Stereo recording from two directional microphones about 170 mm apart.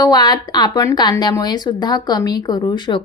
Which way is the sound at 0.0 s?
25° left (ahead or behind).